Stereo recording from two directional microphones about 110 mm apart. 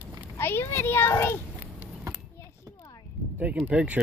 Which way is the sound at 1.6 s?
20° right (ahead or behind).